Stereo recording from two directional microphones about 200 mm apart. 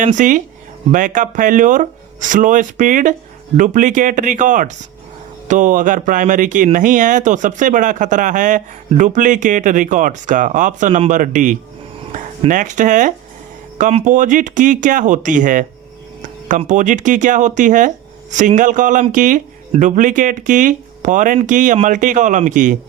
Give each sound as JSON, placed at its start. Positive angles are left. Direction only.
{"t": 0.0, "sound": "speech", "side_deg": -40}